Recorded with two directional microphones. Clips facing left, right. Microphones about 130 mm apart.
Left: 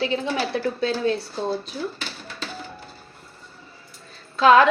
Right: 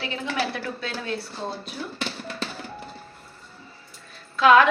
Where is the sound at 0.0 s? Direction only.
30° left (ahead or behind).